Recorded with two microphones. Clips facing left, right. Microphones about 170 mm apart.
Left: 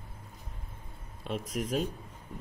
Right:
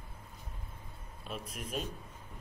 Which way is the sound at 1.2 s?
90° left.